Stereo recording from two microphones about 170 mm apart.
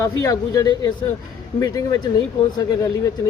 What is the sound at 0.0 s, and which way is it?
Speech, 20° left (ahead or behind).